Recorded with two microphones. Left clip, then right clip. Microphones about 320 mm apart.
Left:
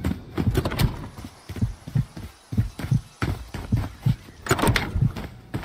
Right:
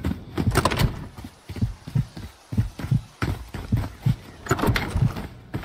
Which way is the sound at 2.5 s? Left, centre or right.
Centre.